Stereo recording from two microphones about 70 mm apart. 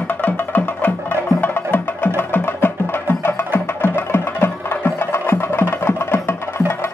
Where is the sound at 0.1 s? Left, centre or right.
Left.